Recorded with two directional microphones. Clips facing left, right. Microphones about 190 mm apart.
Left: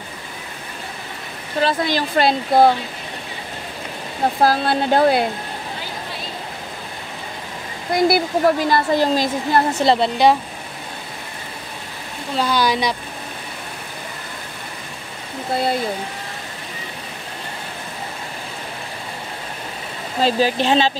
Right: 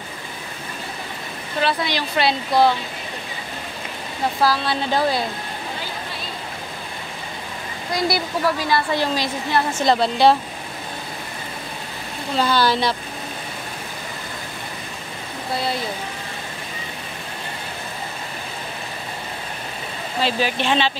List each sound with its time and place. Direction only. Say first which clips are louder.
1.6 s speech: left 3 dB; 45° left (ahead or behind)
4.4 s speech: left 3 dB; 50° left (ahead or behind)
7.9 s speech: left 6 dB; 50° left (ahead or behind)
9.9 s speech: left 1 dB; 20° left (ahead or behind)
12.4 s speech: even; 15° left (ahead or behind)
20.2 s speech: left 4 dB; 40° left (ahead or behind)